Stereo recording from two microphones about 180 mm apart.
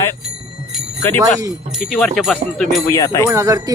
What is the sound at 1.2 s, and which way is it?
Speech, 20° right (ahead or behind).